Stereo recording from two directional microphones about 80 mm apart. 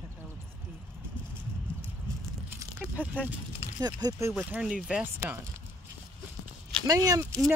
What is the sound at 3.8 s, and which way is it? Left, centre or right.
Speech, right.